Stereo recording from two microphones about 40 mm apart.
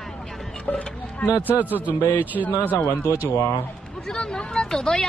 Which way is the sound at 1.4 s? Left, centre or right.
Right.